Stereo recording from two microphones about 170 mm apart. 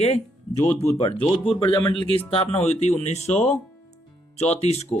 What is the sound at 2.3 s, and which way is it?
Speech, 35° left (ahead or behind).